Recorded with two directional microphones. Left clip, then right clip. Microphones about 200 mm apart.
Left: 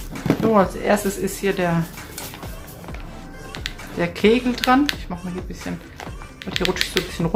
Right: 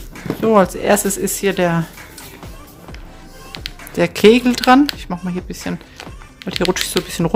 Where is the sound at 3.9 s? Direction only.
55° right (ahead or behind).